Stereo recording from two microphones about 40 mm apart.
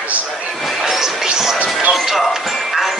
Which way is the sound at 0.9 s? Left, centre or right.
Centre.